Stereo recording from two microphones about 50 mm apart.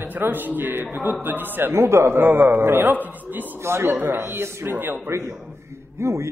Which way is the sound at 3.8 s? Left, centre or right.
Right.